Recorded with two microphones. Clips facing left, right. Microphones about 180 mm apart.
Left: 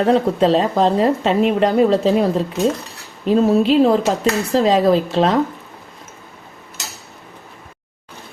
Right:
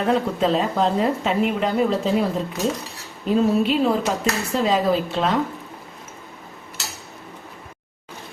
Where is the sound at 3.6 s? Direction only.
35° left (ahead or behind).